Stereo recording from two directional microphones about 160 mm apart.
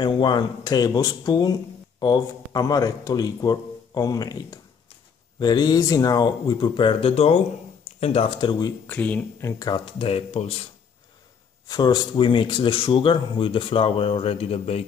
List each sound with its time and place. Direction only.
0.0 s speech: 30° left (ahead or behind)
8.8 s speech: 10° left (ahead or behind); by 10.5 s 40° left (ahead or behind)
11.6 s speech: 25° left (ahead or behind)